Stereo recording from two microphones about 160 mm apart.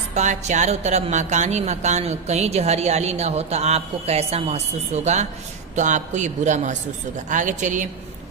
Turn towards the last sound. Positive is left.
turn(degrees=-50)  # may be behind; listen again after turning